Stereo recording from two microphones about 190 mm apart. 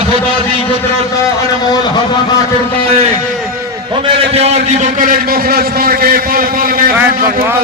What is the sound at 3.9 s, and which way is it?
A man's voice, 30° right (ahead or behind).